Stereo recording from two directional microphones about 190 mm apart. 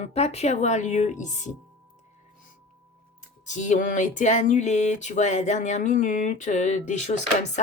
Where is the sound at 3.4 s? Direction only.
40° left (ahead or behind).